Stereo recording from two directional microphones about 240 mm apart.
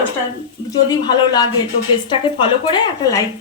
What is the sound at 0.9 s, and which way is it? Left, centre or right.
A woman's voice, centre.